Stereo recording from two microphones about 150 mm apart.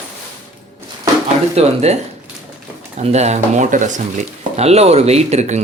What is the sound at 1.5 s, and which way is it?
Speech, 45° right (ahead or behind).